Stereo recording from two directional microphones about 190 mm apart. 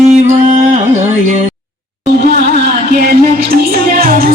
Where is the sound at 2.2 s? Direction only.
55° right (ahead or behind).